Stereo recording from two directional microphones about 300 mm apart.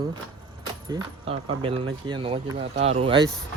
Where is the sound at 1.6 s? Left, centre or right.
Centre.